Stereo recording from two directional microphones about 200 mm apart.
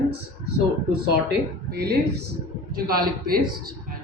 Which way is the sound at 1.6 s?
55° right (ahead or behind).